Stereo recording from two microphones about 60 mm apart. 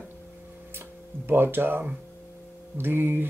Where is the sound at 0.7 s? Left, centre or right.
Right.